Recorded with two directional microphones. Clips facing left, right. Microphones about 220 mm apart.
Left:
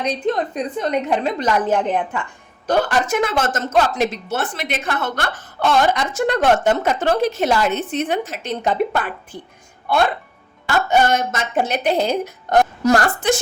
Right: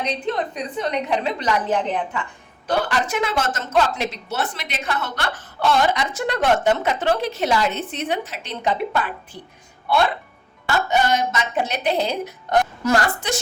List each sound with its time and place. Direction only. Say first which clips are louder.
0.3 s a woman's voice: left 4 dB; 45° left (ahead or behind)